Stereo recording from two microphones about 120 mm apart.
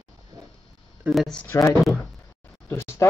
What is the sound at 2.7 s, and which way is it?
Speech, 20° left (ahead or behind).